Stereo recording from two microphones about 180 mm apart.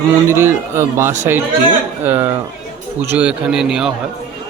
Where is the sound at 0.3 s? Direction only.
15° right (ahead or behind).